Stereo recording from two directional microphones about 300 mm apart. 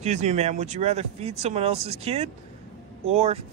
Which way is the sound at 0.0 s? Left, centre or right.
Right.